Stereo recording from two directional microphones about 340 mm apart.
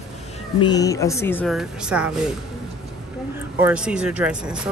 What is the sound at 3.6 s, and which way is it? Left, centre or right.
Speech, centre.